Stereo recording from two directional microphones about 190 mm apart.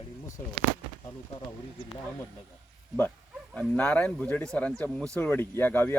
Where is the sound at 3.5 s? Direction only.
5° left (ahead or behind).